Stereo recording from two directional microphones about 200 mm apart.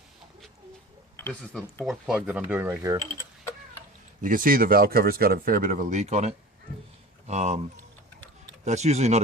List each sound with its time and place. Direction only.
1.1 s speech: 10° left (ahead or behind); by 3.0 s 15° right (ahead or behind)
4.2 s speech: 40° right (ahead or behind)
8.6 s speech: 35° right (ahead or behind)